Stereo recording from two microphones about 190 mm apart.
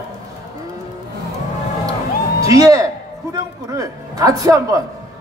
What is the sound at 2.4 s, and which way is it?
A man's voice, 15° right (ahead or behind).